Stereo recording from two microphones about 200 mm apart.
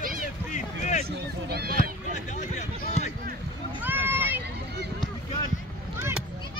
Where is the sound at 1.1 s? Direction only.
55° right (ahead or behind).